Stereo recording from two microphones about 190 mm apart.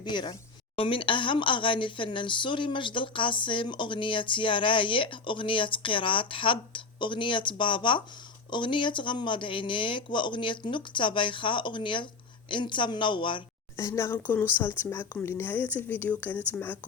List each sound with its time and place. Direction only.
0.0 s a woman's voice: 25° left (ahead or behind)